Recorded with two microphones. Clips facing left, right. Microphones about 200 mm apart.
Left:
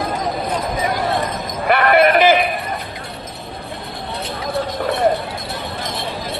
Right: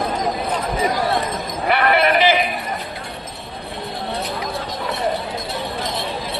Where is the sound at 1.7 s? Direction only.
50° left (ahead or behind).